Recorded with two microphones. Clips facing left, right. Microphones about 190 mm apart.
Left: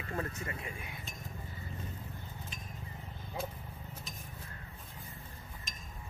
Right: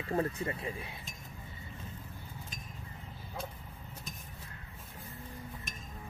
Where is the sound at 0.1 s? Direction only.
30° right (ahead or behind).